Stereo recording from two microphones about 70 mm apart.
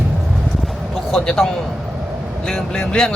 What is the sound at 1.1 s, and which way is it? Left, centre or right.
Speech, centre.